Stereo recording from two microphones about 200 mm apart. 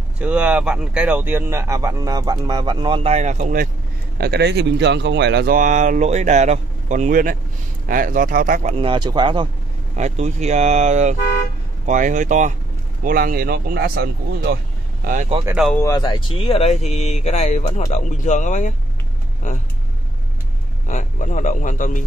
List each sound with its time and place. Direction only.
0.2 s speech: 5° right (ahead or behind); by 3.6 s 35° right (ahead or behind)
4.2 s speech: 55° right (ahead or behind)
5.6 s speech: 40° right (ahead or behind)
8.8 s speech: 25° right (ahead or behind)
9.9 s speech: 35° right (ahead or behind)
15.0 s speech: 40° right (ahead or behind)
15.4 s speech: 5° right (ahead or behind)
15.7 s speech: 15° left (ahead or behind)
16.3 s speech: 30° left (ahead or behind)
20.8 s speech: 40° left (ahead or behind)